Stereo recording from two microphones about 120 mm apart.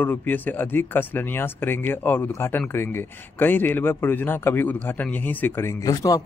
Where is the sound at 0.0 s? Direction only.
15° left (ahead or behind).